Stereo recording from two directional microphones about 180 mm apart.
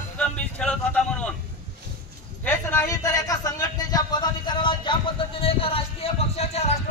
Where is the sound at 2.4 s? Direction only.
10° left (ahead or behind).